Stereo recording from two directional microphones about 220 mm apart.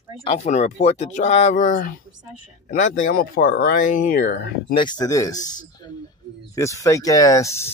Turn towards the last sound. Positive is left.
turn(degrees=15)  # may be behind; listen again after turning